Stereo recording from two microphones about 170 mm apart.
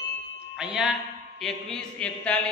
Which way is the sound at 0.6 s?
5° right (ahead or behind).